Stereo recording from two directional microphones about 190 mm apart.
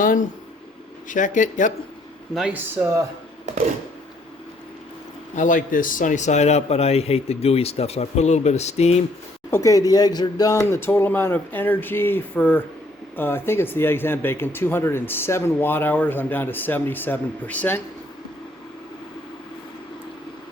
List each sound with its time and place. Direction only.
0.0 s a man's voice: 45° left (ahead or behind)
2.3 s speech: 5° right (ahead or behind)
5.4 s a man's voice: 45° left (ahead or behind)
9.5 s speech: 15° left (ahead or behind)